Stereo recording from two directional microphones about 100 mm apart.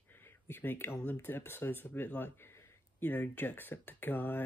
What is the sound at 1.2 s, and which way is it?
Speech, 20° left (ahead or behind).